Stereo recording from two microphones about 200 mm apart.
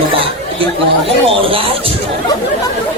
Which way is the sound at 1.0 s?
25° right (ahead or behind).